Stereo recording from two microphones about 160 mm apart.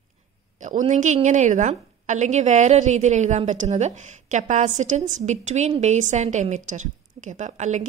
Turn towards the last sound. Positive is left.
turn(degrees=-45)  # may be behind; listen again after turning